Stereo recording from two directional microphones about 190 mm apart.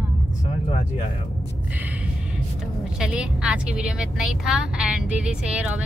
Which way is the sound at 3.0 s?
5° right (ahead or behind).